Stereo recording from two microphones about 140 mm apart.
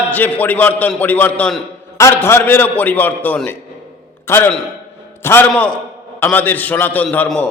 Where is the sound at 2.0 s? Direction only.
20° left (ahead or behind).